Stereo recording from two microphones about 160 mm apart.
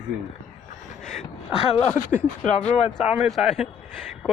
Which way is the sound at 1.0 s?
5° left (ahead or behind).